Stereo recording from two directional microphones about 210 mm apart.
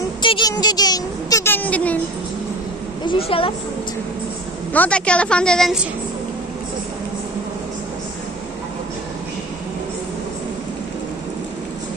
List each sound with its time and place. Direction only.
0.2 s speech: 20° left (ahead or behind)
3.1 s a woman's voice: 25° left (ahead or behind)
4.7 s a woman's voice: 5° left (ahead or behind)